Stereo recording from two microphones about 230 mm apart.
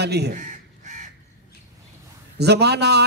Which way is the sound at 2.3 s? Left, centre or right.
Right.